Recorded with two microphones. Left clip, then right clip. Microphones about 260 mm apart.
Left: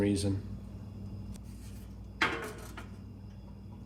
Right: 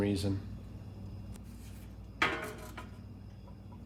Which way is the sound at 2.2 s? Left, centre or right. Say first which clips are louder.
Even; centre.